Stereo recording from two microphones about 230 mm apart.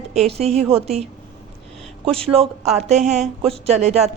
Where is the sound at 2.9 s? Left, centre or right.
Right.